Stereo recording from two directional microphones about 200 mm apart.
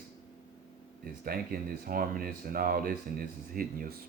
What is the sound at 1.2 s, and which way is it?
Speech, 50° right (ahead or behind).